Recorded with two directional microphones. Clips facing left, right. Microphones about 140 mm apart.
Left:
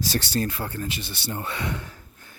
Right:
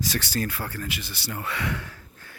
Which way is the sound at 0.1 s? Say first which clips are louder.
Left 3 dB; 30° left (ahead or behind).